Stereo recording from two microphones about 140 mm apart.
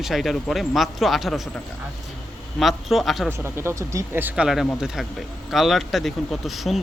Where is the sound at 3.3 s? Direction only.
15° right (ahead or behind).